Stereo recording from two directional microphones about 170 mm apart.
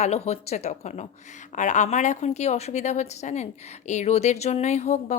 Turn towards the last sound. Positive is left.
turn(degrees=40)  # may be behind; listen again after turning